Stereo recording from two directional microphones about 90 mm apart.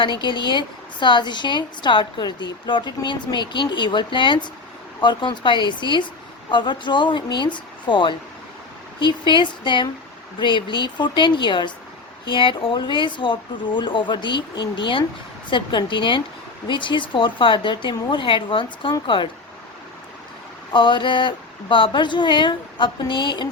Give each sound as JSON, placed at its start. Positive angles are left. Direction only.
{"t": 0.0, "sound": "a woman's voice", "side_deg": 60}
{"t": 20.7, "sound": "a woman's voice", "side_deg": 65}